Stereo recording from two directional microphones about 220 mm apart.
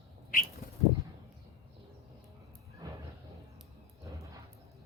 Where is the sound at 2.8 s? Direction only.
20° right (ahead or behind).